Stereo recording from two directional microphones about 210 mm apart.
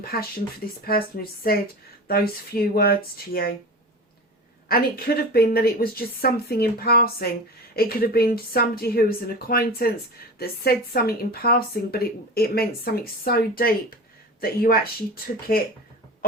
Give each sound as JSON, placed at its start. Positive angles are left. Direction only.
{"t": 0.0, "sound": "speech", "side_deg": 45}
{"t": 4.7, "sound": "speech", "side_deg": 45}